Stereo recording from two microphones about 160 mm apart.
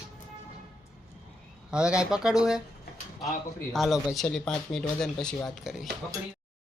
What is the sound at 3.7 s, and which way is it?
Speech, centre (ahead or behind).